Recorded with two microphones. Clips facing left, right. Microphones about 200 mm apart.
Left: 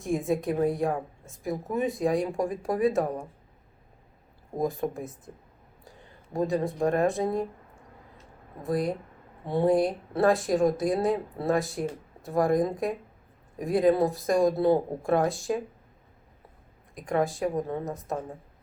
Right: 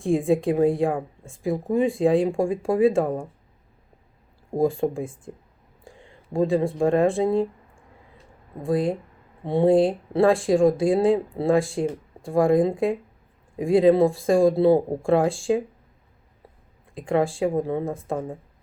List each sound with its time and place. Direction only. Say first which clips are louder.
0.0 s speech: right 6 dB; 30° right (ahead or behind)
4.5 s speech: right 7 dB; 30° right (ahead or behind)
6.3 s speech: right 5 dB; 30° right (ahead or behind)
8.6 s speech: right 5 dB; 30° right (ahead or behind)
16.9 s speech: right 4 dB; 30° right (ahead or behind)